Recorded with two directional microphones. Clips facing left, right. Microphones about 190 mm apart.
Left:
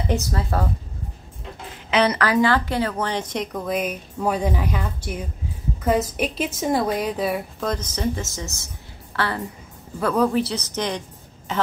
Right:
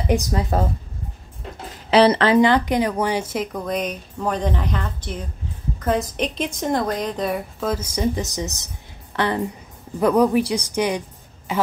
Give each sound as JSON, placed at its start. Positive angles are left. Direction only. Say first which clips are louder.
{"t": 0.1, "sound": "speech", "louder": "right 5 dB", "side_deg": -15}
{"t": 1.9, "sound": "a woman's voice", "louder": "right 5 dB", "side_deg": -30}